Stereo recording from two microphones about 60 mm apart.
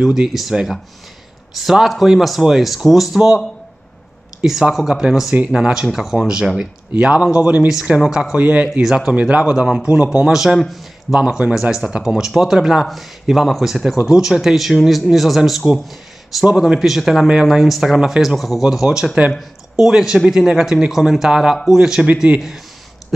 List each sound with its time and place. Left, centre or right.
0.0 s speech: centre
4.5 s speech: centre
5.3 s speech: right
5.6 s speech: centre
10.3 s a man's voice: centre
11.1 s speech: centre